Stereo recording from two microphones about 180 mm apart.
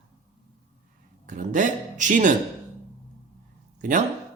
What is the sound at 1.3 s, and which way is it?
Speech, 45° right (ahead or behind).